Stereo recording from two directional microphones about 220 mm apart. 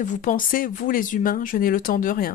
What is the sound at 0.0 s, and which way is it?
Speech, 35° left (ahead or behind).